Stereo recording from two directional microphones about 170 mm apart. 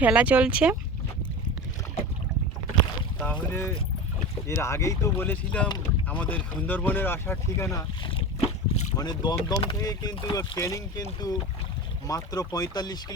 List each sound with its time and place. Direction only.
0.0 s speech: 10° right (ahead or behind)
3.5 s speech: 15° left (ahead or behind); by 8.9 s 35° left (ahead or behind)
9.0 s speech: 25° left (ahead or behind)